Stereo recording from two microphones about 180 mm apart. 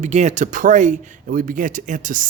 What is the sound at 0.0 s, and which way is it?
Speech, 40° right (ahead or behind).